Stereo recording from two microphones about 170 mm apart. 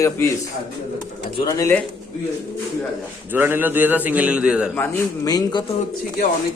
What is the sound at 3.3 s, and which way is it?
A man's voice, 10° right (ahead or behind).